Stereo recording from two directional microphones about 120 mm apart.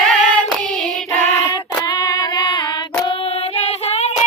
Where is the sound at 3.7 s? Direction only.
60° left (ahead or behind).